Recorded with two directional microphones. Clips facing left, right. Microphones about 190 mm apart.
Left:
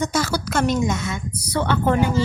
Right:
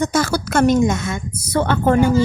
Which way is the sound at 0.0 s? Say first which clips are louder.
Right 4 dB; 50° right (ahead or behind).